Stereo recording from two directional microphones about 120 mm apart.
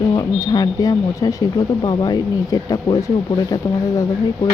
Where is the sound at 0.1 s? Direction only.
35° left (ahead or behind).